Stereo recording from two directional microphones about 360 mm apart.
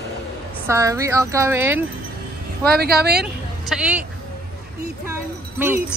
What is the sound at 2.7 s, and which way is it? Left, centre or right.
Speech, right.